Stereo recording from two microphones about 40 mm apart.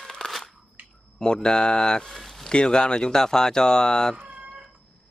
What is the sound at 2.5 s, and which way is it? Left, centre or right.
Speech, left.